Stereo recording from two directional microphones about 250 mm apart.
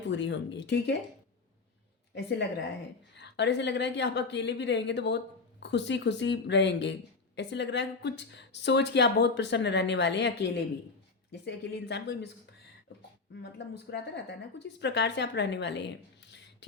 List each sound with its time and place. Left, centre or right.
0.1 s a woman's voice: left
3.2 s a woman's voice: left
13.6 s a woman's voice: left